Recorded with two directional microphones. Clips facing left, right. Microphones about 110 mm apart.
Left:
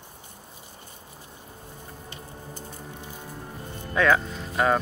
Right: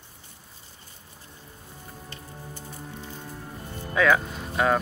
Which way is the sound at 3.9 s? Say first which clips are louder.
Even; centre (ahead or behind).